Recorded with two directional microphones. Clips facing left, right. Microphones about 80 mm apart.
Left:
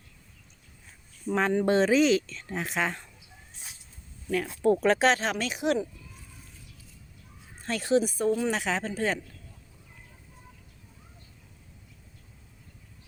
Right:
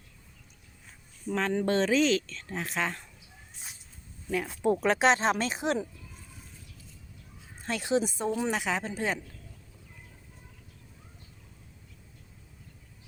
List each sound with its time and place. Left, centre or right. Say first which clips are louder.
1.3 s speech: left 3 dB; centre
4.3 s speech: left 3 dB; centre; by 5.8 s right
7.6 s speech: left 3 dB; centre